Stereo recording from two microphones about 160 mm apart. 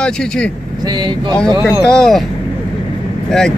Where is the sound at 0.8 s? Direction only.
30° right (ahead or behind).